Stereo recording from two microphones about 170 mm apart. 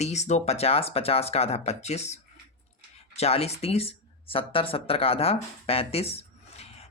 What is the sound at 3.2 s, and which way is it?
Speech, 35° left (ahead or behind).